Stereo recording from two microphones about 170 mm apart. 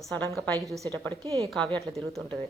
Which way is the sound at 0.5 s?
20° right (ahead or behind).